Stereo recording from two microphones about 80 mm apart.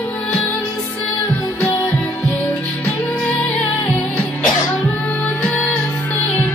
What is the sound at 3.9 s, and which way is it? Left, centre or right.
Music, centre.